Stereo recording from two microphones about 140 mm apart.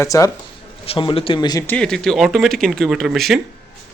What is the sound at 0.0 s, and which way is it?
Speech, 25° left (ahead or behind).